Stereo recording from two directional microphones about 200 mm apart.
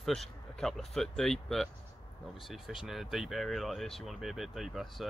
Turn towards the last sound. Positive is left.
turn(degrees=0)  # may be behind; listen again after turning